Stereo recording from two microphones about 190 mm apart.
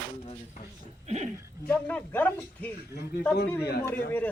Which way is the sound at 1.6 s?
5° left (ahead or behind).